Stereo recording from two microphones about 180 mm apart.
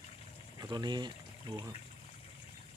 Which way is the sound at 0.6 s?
25° right (ahead or behind).